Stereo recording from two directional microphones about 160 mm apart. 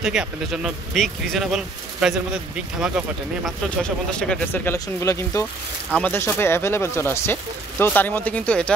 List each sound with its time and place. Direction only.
0.0 s a man's voice: 5° right (ahead or behind)
3.4 s speech: 5° left (ahead or behind)
4.7 s speech: 20° left (ahead or behind)
5.9 s speech: 5° left (ahead or behind)